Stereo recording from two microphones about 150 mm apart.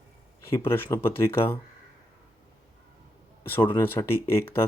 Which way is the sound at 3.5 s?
15° left (ahead or behind).